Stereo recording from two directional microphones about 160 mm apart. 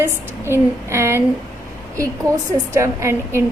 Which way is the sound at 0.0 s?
15° right (ahead or behind).